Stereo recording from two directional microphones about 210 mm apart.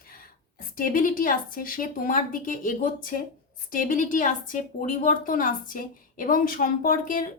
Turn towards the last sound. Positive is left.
turn(degrees=40)  # may be behind; listen again after turning